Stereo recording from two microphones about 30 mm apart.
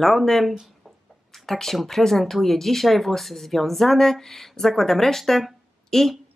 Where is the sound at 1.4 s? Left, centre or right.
Centre.